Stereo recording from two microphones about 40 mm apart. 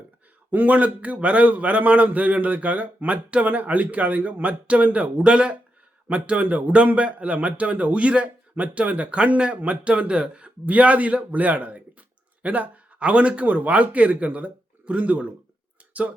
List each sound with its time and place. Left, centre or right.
0.5 s a man's voice: right
5.1 s a man's voice: right